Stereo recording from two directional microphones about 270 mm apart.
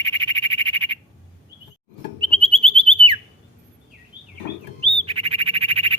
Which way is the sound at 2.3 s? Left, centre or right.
Centre.